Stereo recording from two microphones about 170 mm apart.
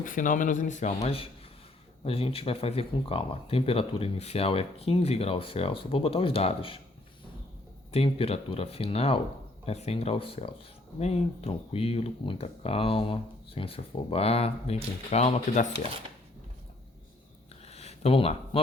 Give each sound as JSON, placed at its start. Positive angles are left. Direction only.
{"t": 0.0, "sound": "speech", "side_deg": 50}
{"t": 7.9, "sound": "speech", "side_deg": 35}
{"t": 17.7, "sound": "a sound", "side_deg": 35}